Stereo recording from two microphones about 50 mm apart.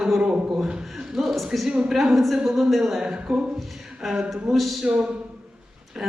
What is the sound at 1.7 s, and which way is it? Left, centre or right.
Speech, centre.